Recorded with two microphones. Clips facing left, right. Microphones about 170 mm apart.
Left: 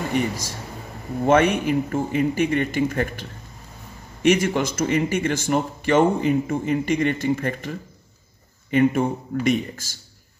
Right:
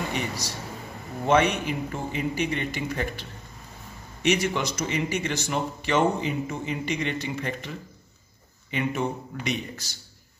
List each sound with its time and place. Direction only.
0.1 s speech: 50° left (ahead or behind)